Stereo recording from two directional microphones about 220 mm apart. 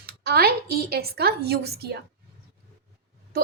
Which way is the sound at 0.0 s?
45° right (ahead or behind).